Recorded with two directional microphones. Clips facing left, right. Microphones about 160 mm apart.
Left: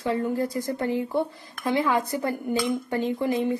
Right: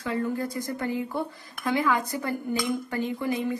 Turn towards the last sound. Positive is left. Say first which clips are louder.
# left 3 dB
turn(degrees=25)  # may be behind; listen again after turning